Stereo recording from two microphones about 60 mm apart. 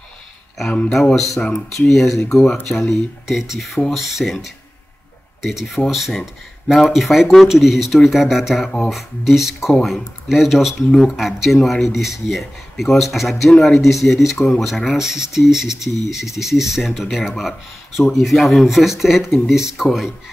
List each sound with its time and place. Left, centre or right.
0.7 s a man's voice: centre
1.9 s a man's voice: centre
11.1 s speech: centre
13.5 s a man's voice: centre
13.7 s speech: centre